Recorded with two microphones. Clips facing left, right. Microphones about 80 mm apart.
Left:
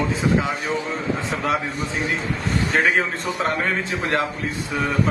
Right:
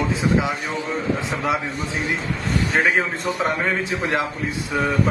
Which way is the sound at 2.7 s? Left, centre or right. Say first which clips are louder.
Even; centre.